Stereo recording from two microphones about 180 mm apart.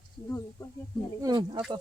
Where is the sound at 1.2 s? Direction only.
25° right (ahead or behind).